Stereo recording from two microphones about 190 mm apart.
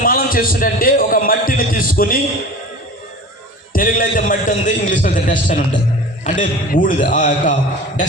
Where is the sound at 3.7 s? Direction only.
45° left (ahead or behind).